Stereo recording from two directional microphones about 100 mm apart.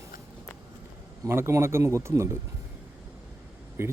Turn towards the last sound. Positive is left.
turn(degrees=-30)  # may be behind; listen again after turning